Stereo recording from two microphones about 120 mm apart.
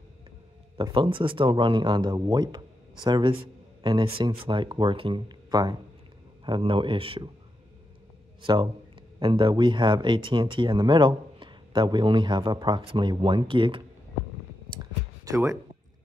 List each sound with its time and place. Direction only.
0.9 s speech: 45° right (ahead or behind)
8.4 s a man's voice: 40° right (ahead or behind)
14.8 s a sound: 25° right (ahead or behind)